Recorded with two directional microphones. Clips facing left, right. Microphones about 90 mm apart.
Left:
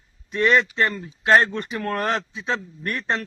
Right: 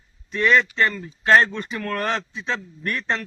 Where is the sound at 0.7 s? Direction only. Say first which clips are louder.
Right 1 dB; 20° left (ahead or behind).